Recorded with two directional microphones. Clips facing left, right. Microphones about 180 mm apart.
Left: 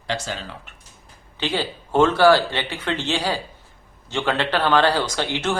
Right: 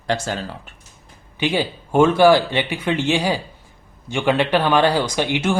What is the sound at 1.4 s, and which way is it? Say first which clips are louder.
Speech: right 4 dB; 15° right (ahead or behind).